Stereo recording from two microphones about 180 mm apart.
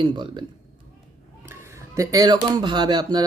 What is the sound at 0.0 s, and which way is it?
Speech, 25° right (ahead or behind).